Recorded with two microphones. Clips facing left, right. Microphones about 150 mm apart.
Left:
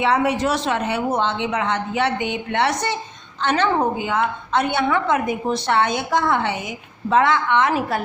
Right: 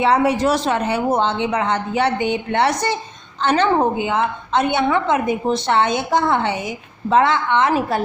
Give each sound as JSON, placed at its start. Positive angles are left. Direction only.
{"t": 0.0, "sound": "speech", "side_deg": -35}
{"t": 3.9, "sound": "a woman's voice", "side_deg": -20}